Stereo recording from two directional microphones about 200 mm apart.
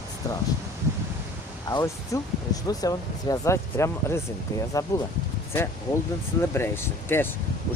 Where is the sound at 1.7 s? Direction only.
15° left (ahead or behind).